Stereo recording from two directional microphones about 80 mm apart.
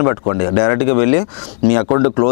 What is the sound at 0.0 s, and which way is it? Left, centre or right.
Speech, left.